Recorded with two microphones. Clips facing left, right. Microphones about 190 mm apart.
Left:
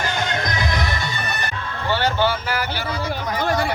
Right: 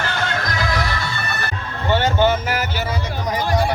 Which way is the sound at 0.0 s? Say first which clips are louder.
Even; 15° left (ahead or behind).